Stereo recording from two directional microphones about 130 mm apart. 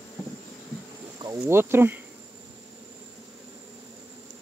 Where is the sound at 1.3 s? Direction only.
15° right (ahead or behind).